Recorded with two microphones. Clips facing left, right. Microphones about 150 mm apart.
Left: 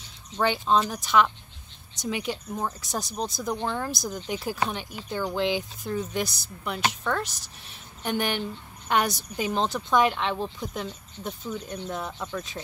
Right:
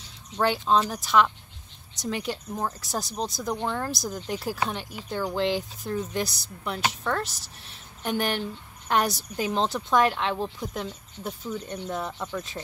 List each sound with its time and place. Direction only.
0.4 s speech: centre (ahead or behind)